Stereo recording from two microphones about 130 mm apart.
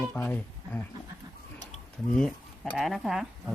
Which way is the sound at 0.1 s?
15° left (ahead or behind).